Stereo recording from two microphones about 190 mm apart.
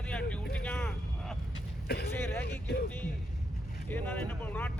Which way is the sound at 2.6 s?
55° left (ahead or behind).